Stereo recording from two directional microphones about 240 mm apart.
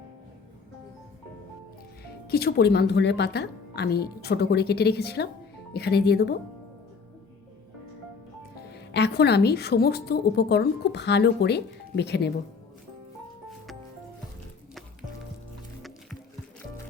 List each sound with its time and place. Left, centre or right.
2.3 s a woman's voice: left
8.7 s a woman's voice: left